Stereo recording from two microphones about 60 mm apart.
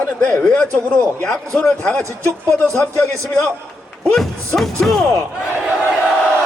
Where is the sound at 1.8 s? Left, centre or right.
Left.